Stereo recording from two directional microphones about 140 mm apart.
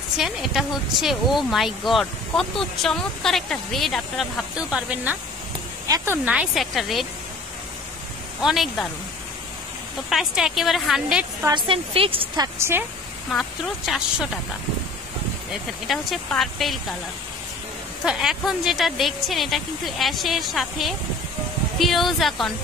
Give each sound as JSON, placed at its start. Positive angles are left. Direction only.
{"t": 0.2, "sound": "speech", "side_deg": 0}
{"t": 5.9, "sound": "speech", "side_deg": -25}
{"t": 6.2, "sound": "speech", "side_deg": -5}
{"t": 8.4, "sound": "speech", "side_deg": 0}
{"t": 10.0, "sound": "speech", "side_deg": 0}
{"t": 11.4, "sound": "a woman's voice", "side_deg": -35}
{"t": 12.5, "sound": "speech", "side_deg": -15}
{"t": 13.3, "sound": "speech", "side_deg": 0}
{"t": 15.9, "sound": "speech", "side_deg": 0}
{"t": 18.0, "sound": "speech", "side_deg": 0}